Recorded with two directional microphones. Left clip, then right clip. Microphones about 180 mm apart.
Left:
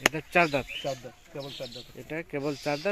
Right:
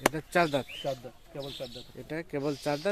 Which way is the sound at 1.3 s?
20° left (ahead or behind).